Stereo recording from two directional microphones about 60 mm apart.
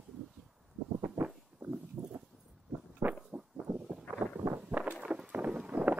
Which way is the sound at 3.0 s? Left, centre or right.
Right.